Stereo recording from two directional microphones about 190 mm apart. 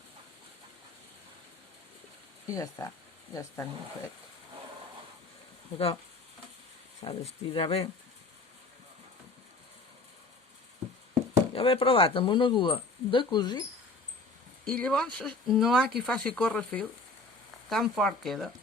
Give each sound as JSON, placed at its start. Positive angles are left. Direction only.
{"t": 2.5, "sound": "speech", "side_deg": 15}
{"t": 5.7, "sound": "speech", "side_deg": 30}
{"t": 7.0, "sound": "speech", "side_deg": 30}
{"t": 11.5, "sound": "speech", "side_deg": 30}
{"t": 14.6, "sound": "speech", "side_deg": 5}